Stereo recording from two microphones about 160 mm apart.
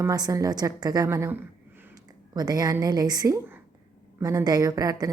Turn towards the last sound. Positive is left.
turn(degrees=-20)  # may be behind; listen again after turning